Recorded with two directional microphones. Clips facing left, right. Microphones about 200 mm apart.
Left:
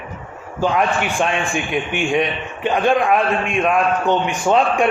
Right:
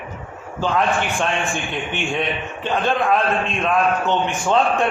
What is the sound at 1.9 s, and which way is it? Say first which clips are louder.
A man's voice: left 4 dB; 15° left (ahead or behind).